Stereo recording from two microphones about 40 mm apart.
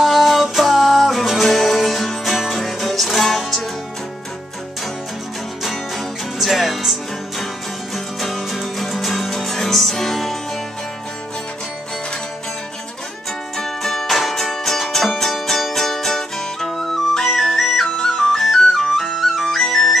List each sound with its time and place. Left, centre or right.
0.0 s music: centre
6.4 s music: centre
13.6 s music: centre
17.8 s flute: centre